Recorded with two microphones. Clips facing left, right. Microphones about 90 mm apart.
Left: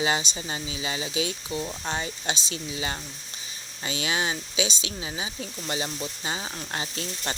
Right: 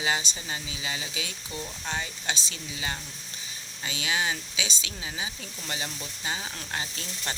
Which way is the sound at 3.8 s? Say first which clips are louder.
Left 2 dB; 30° left (ahead or behind).